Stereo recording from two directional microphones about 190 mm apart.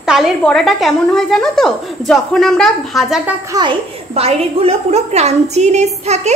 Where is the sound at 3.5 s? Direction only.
25° right (ahead or behind).